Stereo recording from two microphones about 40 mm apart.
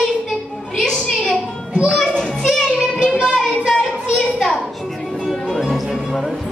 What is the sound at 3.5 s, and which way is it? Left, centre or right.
Child singing, centre.